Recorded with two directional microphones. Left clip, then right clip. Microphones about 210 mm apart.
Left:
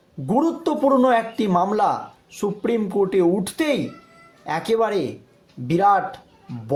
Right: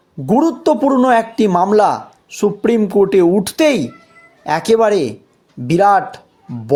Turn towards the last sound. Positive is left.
turn(degrees=-40)  # may be behind; listen again after turning